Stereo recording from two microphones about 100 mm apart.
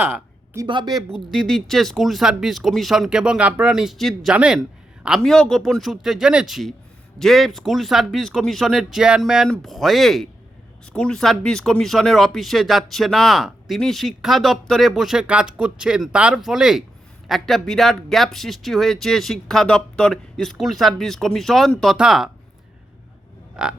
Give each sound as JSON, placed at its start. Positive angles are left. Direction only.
{"t": 0.0, "sound": "a sound", "side_deg": -25}
{"t": 0.7, "sound": "speech", "side_deg": -50}
{"t": 1.5, "sound": "speech", "side_deg": 0}
{"t": 23.6, "sound": "speech", "side_deg": -5}